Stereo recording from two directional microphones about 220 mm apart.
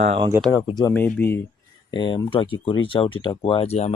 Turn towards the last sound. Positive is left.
turn(degrees=30)  # may be behind; listen again after turning